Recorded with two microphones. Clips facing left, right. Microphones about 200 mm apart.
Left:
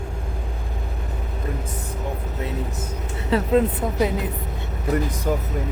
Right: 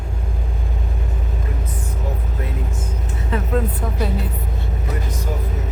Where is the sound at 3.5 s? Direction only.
15° left (ahead or behind).